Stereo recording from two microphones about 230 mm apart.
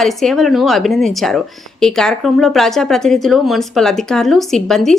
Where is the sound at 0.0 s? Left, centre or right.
Centre.